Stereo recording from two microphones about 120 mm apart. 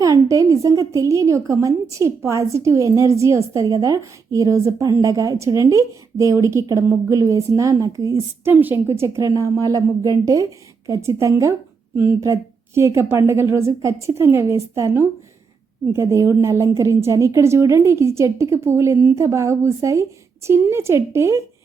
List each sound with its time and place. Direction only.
0.0 s a woman's voice: 25° right (ahead or behind)